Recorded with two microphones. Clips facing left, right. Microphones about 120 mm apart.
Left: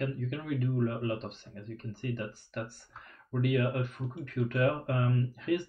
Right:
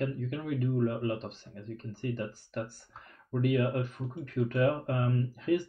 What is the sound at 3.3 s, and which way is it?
Speech, 30° right (ahead or behind).